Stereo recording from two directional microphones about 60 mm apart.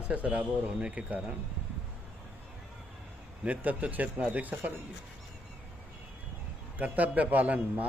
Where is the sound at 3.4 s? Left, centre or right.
Right.